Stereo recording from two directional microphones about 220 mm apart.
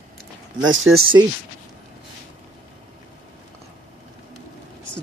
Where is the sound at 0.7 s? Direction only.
60° right (ahead or behind).